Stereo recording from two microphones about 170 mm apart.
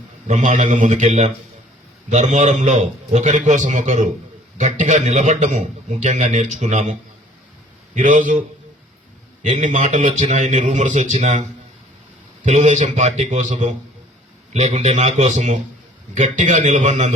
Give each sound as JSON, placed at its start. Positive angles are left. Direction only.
{"t": 0.3, "sound": "a man's voice", "side_deg": -45}
{"t": 7.9, "sound": "a man's voice", "side_deg": -45}
{"t": 12.5, "sound": "a man's voice", "side_deg": -45}